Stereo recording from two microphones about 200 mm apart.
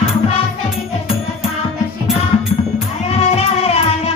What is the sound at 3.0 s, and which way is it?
Music, 30° left (ahead or behind).